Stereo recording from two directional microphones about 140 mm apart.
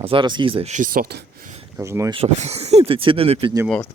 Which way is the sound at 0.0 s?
40° right (ahead or behind).